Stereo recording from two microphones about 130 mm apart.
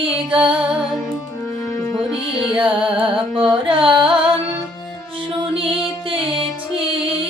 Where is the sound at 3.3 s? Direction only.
40° right (ahead or behind).